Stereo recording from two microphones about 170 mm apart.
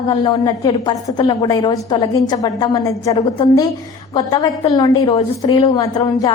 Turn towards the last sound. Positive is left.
turn(degrees=25)  # may be behind; listen again after turning